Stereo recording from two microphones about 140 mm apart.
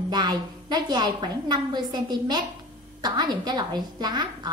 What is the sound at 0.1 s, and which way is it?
A woman's voice, 30° right (ahead or behind).